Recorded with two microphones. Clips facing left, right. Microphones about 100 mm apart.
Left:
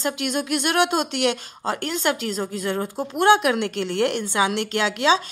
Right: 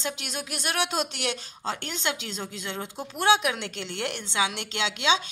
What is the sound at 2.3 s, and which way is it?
Speech, 40° left (ahead or behind).